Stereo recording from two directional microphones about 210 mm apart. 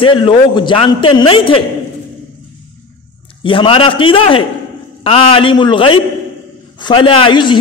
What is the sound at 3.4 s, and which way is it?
A man's voice, 25° left (ahead or behind).